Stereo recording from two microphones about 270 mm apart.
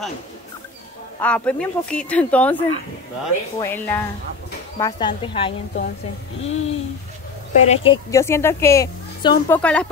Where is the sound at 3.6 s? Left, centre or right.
Centre.